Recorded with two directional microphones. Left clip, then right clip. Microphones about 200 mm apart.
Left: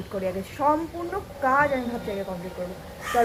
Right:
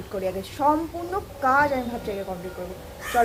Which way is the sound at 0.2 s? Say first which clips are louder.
Right 1 dB; 10° right (ahead or behind).